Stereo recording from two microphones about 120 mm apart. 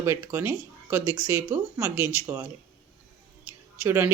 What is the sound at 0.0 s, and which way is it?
Speech, 20° right (ahead or behind).